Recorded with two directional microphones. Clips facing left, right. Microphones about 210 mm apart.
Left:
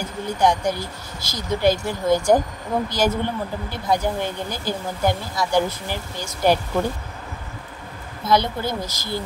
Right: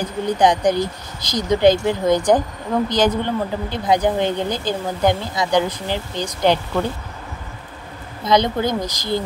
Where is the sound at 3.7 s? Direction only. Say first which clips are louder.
Right 4 dB; 20° right (ahead or behind).